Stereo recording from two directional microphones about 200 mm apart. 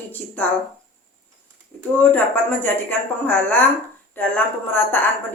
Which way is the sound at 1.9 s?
10° left (ahead or behind).